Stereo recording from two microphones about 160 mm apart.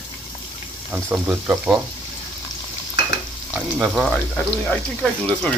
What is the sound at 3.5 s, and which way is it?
Speech, 5° right (ahead or behind).